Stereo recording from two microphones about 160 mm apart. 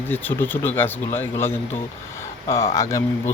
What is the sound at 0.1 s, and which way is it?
Speech, 10° left (ahead or behind).